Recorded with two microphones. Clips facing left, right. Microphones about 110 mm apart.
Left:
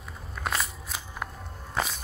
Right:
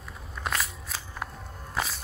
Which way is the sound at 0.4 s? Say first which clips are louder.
Left 1 dB; centre (ahead or behind).